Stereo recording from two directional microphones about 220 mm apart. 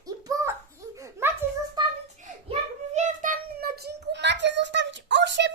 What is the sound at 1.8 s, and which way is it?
Child singing, 30° right (ahead or behind).